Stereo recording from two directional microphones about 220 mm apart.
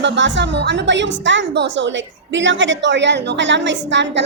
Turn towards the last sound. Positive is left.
turn(degrees=-55)  # may be behind; listen again after turning